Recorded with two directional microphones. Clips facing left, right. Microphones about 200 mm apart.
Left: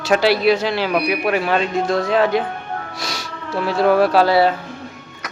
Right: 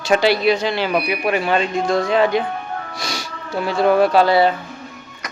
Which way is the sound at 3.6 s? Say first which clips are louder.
Even; centre (ahead or behind).